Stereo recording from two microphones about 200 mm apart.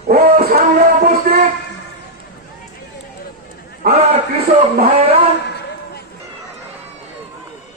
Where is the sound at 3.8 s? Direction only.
50° right (ahead or behind).